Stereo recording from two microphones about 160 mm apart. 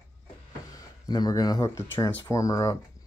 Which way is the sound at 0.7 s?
25° left (ahead or behind).